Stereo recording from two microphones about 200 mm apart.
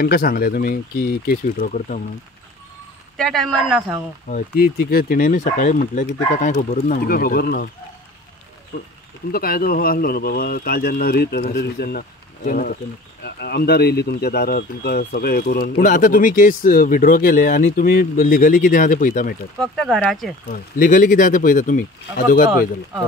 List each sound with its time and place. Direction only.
0.0 s speech: 50° left (ahead or behind)
3.2 s speech: centre (ahead or behind)
4.3 s speech: 50° left (ahead or behind)
8.7 s speech: 35° left (ahead or behind)
9.3 s speech: 50° left (ahead or behind)
19.6 s speech: 5° left (ahead or behind)
20.8 s speech: 40° left (ahead or behind)